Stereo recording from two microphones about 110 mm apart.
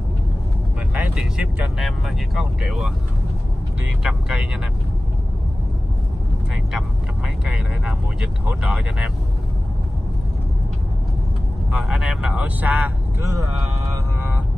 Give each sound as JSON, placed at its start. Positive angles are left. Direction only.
{"t": 0.9, "sound": "speech", "side_deg": -10}
{"t": 4.0, "sound": "speech", "side_deg": -5}
{"t": 7.4, "sound": "speech", "side_deg": -5}
{"t": 11.7, "sound": "speech", "side_deg": -5}
{"t": 13.8, "sound": "mantra", "side_deg": -20}